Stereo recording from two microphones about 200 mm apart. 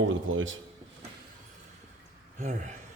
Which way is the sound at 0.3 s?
75° right (ahead or behind).